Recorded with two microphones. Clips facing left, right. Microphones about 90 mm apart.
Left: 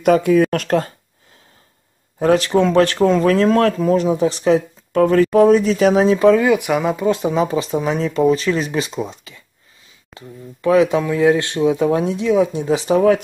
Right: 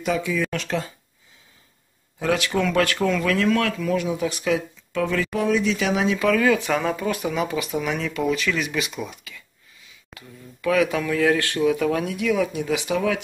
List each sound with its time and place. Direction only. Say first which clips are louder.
0.0 s speech: left 11 dB; 55° left (ahead or behind)
2.1 s speech: left 8 dB; 35° left (ahead or behind)